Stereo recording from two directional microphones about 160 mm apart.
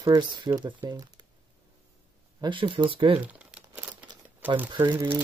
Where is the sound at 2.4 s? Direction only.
30° right (ahead or behind).